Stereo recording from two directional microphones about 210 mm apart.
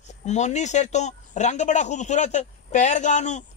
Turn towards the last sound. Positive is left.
turn(degrees=35)  # may be behind; listen again after turning